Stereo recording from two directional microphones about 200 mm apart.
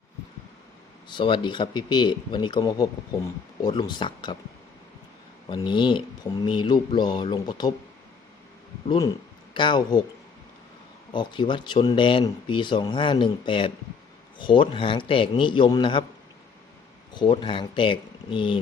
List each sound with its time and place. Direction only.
1.0 s speech: 25° left (ahead or behind)
5.5 s speech: 25° left (ahead or behind)
9.6 s speech: 25° left (ahead or behind)
11.1 s speech: 25° left (ahead or behind)
17.3 s speech: 25° left (ahead or behind)